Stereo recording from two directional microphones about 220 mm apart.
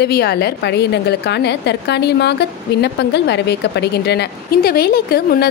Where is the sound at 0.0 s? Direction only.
45° left (ahead or behind).